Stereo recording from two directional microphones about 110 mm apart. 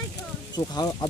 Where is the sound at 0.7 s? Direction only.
35° left (ahead or behind).